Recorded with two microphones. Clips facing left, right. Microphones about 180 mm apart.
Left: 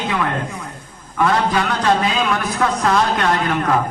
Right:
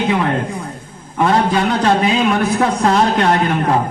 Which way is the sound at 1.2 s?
25° right (ahead or behind).